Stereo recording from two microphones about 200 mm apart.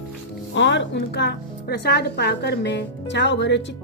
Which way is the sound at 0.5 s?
65° left (ahead or behind).